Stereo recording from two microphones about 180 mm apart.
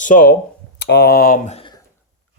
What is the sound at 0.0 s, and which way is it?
Speech, 45° left (ahead or behind).